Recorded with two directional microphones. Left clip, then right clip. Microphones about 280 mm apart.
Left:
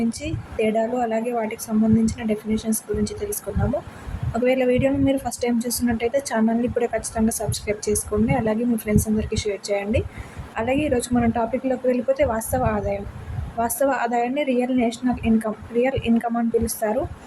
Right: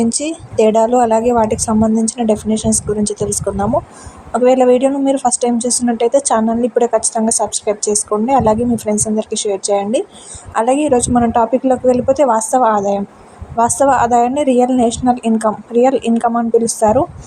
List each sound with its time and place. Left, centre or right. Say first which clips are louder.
0.0 s a woman's voice: right 10 dB; right
4.4 s a woman's voice: right 9 dB; centre